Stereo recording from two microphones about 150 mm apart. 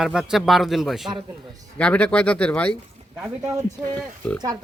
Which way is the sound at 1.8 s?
10° left (ahead or behind).